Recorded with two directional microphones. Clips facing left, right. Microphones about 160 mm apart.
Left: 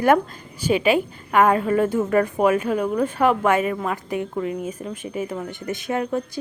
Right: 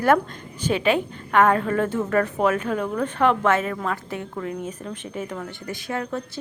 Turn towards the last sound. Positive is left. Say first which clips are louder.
# left 4 dB
turn(degrees=15)  # may be behind; listen again after turning